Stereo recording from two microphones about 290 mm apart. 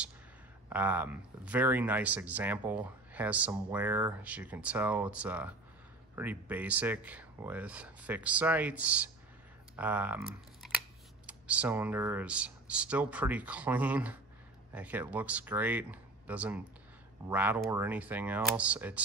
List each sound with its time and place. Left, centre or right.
0.7 s speech: centre